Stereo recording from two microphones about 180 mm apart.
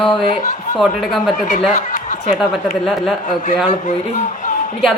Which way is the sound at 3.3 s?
45° left (ahead or behind).